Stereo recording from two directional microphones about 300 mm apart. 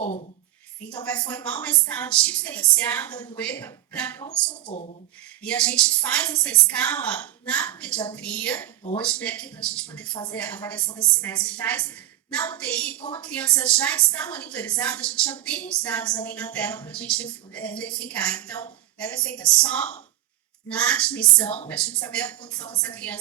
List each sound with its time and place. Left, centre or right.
0.0 s a sound: left
0.9 s a woman's voice: centre
5.4 s a woman's voice: centre